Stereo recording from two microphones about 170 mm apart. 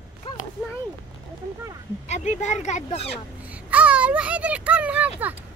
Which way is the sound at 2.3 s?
45° left (ahead or behind).